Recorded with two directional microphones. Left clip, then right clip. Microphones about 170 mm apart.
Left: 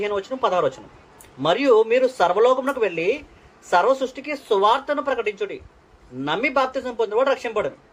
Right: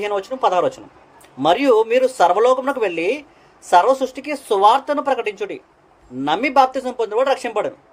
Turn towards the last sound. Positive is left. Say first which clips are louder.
# right 2 dB
turn(degrees=-40)  # may be behind; listen again after turning